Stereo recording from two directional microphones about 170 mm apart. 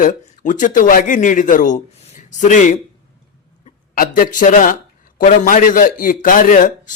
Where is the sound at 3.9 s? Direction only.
55° left (ahead or behind).